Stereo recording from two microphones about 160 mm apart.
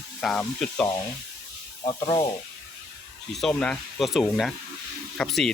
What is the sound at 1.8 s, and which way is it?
Speech, 30° left (ahead or behind).